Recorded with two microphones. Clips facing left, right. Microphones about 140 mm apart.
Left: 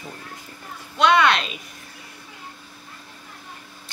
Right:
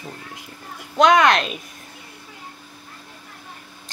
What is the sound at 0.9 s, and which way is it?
Speech, 45° right (ahead or behind).